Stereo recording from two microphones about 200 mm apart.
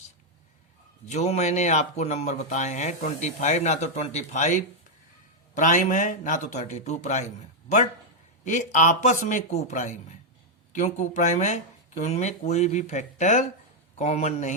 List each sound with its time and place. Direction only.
1.1 s speech: 35° left (ahead or behind)